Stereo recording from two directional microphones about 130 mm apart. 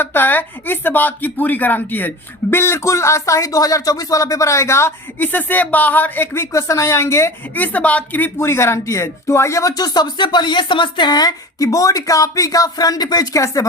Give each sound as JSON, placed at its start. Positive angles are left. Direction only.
{"t": 0.0, "sound": "speech", "side_deg": 15}